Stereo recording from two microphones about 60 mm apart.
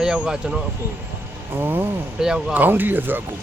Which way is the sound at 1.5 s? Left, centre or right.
Right.